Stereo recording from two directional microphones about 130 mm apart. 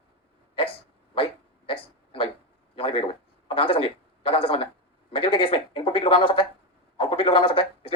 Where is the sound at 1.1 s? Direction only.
45° left (ahead or behind).